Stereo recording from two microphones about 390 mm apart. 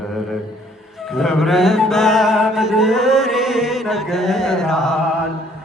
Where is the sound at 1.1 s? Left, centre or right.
Centre.